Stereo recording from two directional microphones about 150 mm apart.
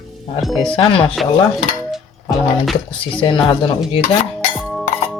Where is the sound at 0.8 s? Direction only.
35° left (ahead or behind).